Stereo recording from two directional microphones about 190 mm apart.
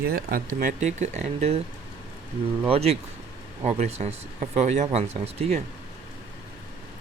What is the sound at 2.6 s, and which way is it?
Speech, 30° right (ahead or behind).